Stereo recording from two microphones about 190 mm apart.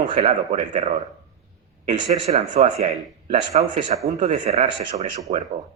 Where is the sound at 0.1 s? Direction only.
35° right (ahead or behind).